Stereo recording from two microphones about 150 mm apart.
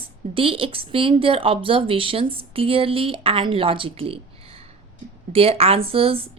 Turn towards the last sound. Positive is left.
turn(degrees=-40)  # may be behind; listen again after turning